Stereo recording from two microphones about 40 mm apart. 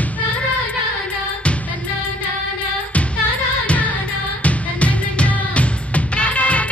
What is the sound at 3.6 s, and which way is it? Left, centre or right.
Music, left.